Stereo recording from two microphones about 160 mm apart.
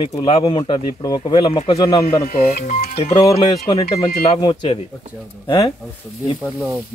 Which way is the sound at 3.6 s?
25° left (ahead or behind).